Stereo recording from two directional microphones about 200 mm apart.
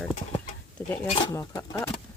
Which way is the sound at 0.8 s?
10° left (ahead or behind).